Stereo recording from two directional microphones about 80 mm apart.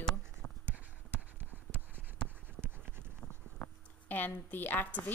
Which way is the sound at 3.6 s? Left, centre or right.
Left.